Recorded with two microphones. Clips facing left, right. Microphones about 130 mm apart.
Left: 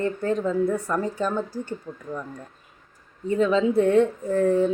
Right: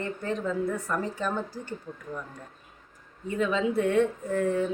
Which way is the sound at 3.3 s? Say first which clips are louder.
Left 6 dB; 35° left (ahead or behind).